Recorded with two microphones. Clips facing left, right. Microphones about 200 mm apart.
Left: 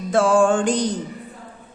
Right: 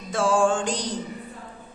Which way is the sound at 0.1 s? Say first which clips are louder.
Left 5 dB; 60° left (ahead or behind).